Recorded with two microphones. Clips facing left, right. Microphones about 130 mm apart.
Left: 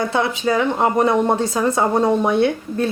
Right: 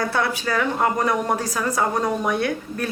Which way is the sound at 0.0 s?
20° left (ahead or behind).